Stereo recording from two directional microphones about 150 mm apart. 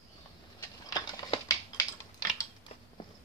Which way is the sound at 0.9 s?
25° left (ahead or behind).